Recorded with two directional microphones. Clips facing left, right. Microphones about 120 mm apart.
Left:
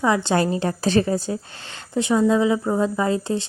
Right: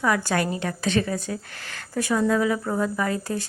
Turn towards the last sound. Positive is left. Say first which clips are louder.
# left 4 dB
turn(degrees=25)  # may be behind; listen again after turning